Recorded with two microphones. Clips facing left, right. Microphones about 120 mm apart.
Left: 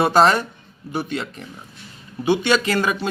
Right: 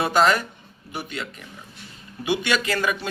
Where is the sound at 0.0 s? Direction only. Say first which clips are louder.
Left 4 dB; 35° left (ahead or behind).